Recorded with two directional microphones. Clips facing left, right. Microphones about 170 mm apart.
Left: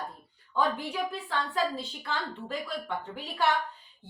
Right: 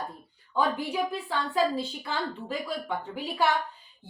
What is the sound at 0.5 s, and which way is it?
Speech, 5° right (ahead or behind).